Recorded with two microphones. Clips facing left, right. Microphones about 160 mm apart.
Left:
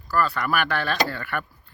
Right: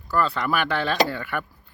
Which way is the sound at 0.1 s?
20° right (ahead or behind).